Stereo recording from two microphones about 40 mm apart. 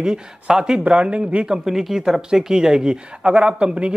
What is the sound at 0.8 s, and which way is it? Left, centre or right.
Speech, right.